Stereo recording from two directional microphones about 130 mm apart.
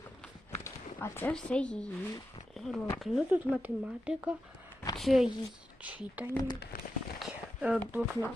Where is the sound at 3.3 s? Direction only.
10° right (ahead or behind).